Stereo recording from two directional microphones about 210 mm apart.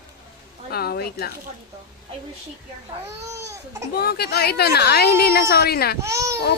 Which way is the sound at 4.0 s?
50° left (ahead or behind).